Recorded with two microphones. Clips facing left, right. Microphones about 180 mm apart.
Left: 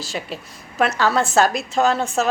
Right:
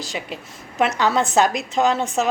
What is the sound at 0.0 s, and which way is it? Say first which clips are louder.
A woman's voice: left 1 dB; 15° right (ahead or behind).